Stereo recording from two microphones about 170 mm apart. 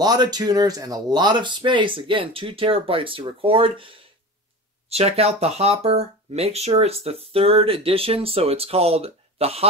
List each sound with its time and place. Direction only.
0.0 s speech: 25° right (ahead or behind)